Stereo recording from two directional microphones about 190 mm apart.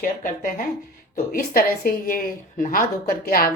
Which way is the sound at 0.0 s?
45° left (ahead or behind).